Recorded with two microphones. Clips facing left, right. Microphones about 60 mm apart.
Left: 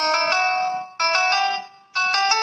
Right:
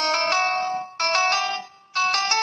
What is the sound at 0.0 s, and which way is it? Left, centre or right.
Music, left.